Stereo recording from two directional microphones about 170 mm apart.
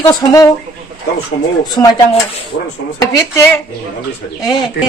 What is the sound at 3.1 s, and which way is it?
Speech, 20° left (ahead or behind).